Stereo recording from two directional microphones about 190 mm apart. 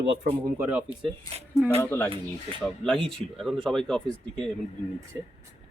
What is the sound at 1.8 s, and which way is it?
Speech, 15° left (ahead or behind).